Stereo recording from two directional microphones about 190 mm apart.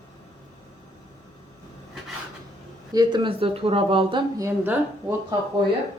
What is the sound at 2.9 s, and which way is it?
A woman's voice, 20° right (ahead or behind).